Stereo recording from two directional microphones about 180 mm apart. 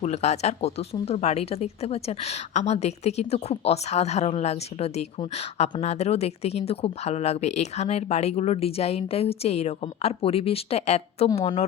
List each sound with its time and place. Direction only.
0.0 s speech: 35° left (ahead or behind)